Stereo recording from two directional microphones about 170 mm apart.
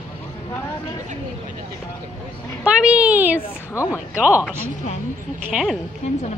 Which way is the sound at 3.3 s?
15° left (ahead or behind).